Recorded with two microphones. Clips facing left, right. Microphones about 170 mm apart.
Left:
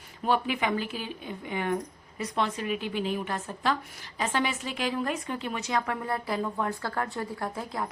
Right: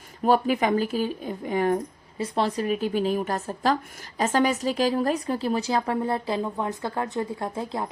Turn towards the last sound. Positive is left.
turn(degrees=-25)  # may be behind; listen again after turning